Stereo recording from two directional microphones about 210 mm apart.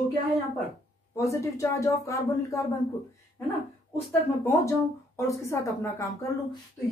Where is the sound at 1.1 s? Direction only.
15° left (ahead or behind).